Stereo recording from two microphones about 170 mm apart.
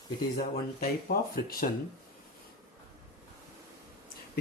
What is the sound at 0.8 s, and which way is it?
Speech, 60° left (ahead or behind).